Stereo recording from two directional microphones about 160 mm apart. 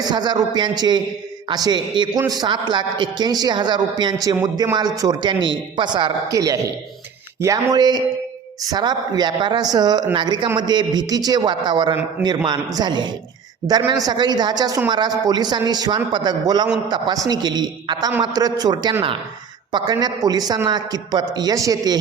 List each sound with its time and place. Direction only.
0.0 s a man's voice: 25° right (ahead or behind)